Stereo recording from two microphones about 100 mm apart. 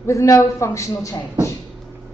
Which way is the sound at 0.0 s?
30° left (ahead or behind).